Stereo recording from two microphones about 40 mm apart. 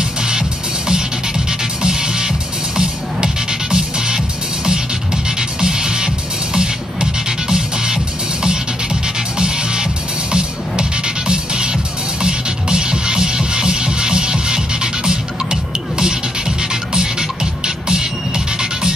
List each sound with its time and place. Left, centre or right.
0.2 s music: centre
3.7 s music: centre
9.4 s music: right
18.6 s music: centre